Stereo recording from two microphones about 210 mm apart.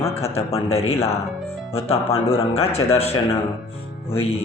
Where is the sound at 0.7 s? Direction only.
30° left (ahead or behind).